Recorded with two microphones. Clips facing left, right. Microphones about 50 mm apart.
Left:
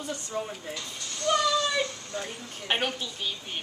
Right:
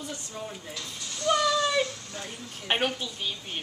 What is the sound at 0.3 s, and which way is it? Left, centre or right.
Speech, centre.